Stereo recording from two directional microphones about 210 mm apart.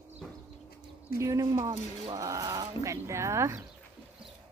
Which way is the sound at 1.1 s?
15° right (ahead or behind).